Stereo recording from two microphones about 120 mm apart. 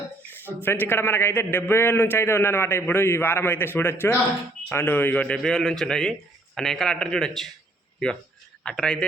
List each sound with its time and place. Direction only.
0.6 s a man's voice: 20° left (ahead or behind)